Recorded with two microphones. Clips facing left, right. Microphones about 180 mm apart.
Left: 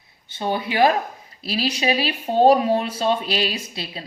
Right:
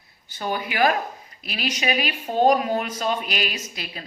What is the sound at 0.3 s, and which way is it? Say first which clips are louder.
A woman's voice: left 3 dB; 25° left (ahead or behind).